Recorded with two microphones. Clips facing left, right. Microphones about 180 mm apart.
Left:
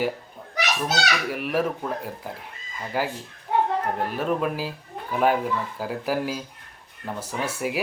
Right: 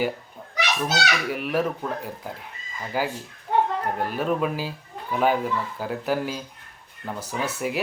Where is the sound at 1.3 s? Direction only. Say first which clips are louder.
Even; centre (ahead or behind).